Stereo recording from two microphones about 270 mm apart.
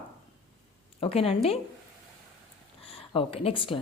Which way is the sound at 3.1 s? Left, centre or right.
Centre.